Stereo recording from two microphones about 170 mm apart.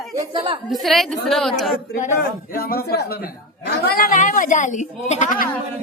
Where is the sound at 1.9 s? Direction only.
55° left (ahead or behind).